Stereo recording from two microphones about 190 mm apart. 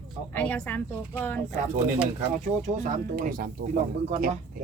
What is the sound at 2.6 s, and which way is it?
Speech, 40° right (ahead or behind).